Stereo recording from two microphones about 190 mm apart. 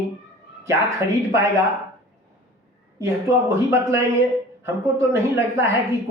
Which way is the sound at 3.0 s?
15° right (ahead or behind).